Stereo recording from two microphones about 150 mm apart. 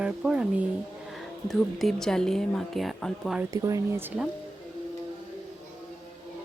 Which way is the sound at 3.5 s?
20° right (ahead or behind).